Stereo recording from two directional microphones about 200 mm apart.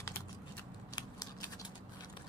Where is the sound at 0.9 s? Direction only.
20° left (ahead or behind).